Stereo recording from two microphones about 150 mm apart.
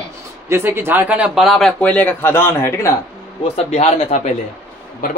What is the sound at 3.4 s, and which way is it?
Speech, 45° left (ahead or behind).